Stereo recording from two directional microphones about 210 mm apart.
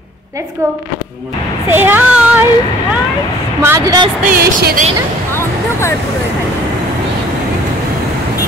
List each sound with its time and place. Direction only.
1.7 s speech: 10° right (ahead or behind)
3.6 s speech: 15° right (ahead or behind)
4.3 s speech: 45° right (ahead or behind)